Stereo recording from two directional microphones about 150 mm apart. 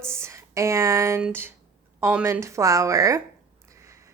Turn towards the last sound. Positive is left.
turn(degrees=-20)  # may be behind; listen again after turning